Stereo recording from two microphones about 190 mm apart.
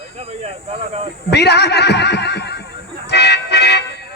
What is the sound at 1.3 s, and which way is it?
Speech, 60° left (ahead or behind).